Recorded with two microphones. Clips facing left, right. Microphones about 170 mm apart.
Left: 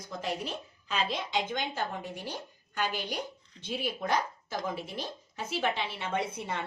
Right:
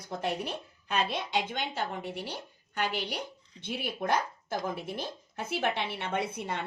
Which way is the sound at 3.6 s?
60° right (ahead or behind).